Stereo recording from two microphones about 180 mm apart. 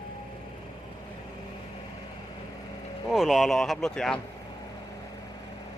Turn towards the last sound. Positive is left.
turn(degrees=5)  # may be behind; listen again after turning